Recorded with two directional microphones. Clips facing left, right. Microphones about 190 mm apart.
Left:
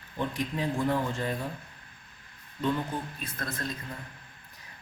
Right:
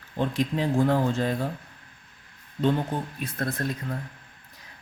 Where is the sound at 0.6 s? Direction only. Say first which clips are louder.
Right 5 dB; 85° right.